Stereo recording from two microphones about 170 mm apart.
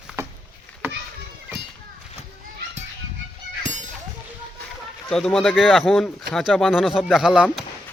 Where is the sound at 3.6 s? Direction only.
45° right (ahead or behind).